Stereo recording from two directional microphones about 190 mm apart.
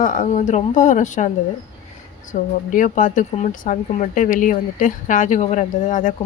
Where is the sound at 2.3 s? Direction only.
40° left (ahead or behind).